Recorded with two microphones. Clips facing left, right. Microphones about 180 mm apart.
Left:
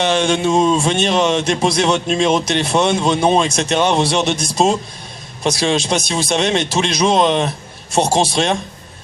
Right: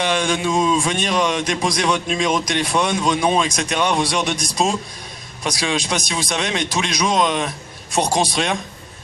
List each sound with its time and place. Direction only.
0.0 s speech: 25° left (ahead or behind)